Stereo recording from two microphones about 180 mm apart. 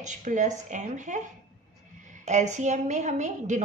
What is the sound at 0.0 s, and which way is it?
A woman's voice, 45° right (ahead or behind).